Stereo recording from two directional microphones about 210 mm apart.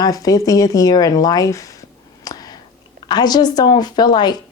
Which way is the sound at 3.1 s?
20° left (ahead or behind).